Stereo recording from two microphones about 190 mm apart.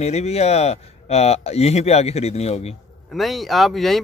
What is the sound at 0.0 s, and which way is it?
Speech, 35° left (ahead or behind).